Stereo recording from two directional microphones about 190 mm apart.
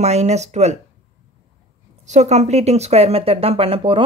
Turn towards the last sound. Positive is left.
turn(degrees=-30)  # may be behind; listen again after turning